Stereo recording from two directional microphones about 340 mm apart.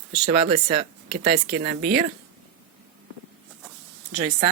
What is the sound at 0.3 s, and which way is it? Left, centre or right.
Speech, right.